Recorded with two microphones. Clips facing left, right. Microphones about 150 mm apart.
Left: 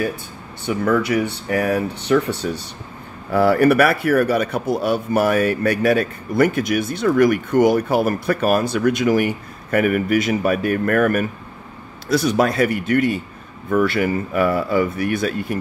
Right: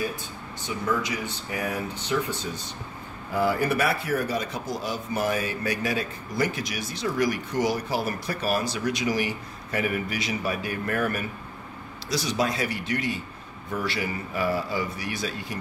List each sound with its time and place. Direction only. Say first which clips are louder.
0.7 s speech: left 9 dB; 60° left (ahead or behind)